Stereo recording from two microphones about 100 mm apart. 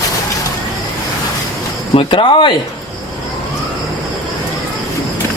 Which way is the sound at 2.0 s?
60° left (ahead or behind).